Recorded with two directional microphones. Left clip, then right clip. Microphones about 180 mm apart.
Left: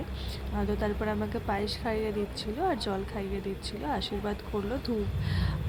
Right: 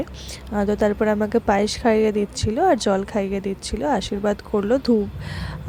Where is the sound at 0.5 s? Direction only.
45° right (ahead or behind).